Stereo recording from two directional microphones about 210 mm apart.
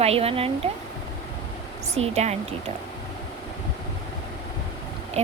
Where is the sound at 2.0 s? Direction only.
30° right (ahead or behind).